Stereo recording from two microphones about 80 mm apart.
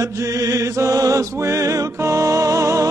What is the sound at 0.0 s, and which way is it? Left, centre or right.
Music, right.